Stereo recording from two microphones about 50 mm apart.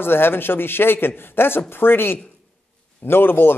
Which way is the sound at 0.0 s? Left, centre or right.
Left.